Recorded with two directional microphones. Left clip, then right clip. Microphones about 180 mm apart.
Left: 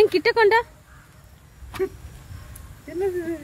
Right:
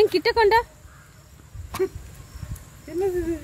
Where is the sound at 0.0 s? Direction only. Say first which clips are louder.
Left 1 dB; 15° left (ahead or behind).